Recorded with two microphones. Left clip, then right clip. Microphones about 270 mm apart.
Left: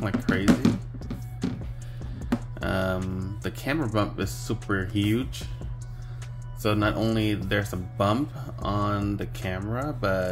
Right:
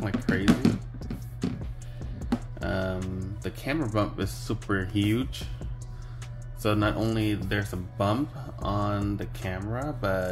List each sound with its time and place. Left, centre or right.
0.0 s music: centre
2.6 s music: centre
3.4 s speech: centre